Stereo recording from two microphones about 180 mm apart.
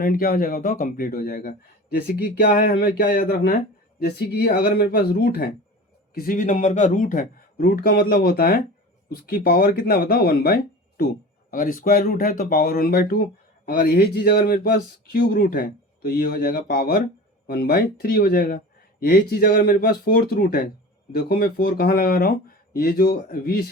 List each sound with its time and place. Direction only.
0.0 s speech: 55° left (ahead or behind)
6.1 s a man's voice: 50° left (ahead or behind)